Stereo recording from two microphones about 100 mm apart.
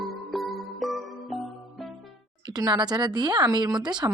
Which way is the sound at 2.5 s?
40° right (ahead or behind).